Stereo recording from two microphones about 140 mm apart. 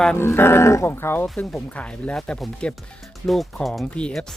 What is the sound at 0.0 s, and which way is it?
Speech, 10° left (ahead or behind).